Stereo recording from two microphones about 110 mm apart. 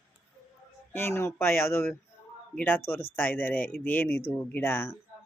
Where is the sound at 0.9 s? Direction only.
20° left (ahead or behind).